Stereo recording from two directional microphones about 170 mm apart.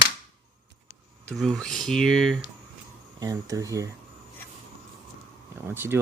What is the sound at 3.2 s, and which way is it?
Speech, 20° right (ahead or behind).